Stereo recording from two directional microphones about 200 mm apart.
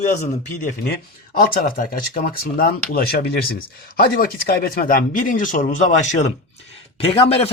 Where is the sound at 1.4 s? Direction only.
45° left (ahead or behind).